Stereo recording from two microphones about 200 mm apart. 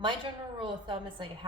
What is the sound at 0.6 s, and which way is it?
Speech, 25° right (ahead or behind).